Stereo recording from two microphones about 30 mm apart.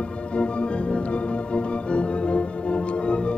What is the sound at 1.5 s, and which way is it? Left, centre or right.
Organ, left.